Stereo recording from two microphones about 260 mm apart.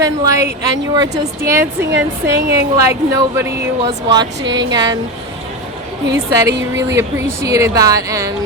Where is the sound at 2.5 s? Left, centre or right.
Centre.